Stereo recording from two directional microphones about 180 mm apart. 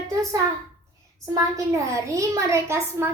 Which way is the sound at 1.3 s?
15° right (ahead or behind).